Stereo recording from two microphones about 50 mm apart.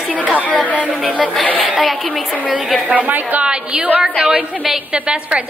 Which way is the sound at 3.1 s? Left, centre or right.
Right.